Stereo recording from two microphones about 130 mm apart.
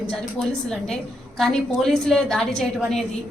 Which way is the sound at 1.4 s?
5° left (ahead or behind).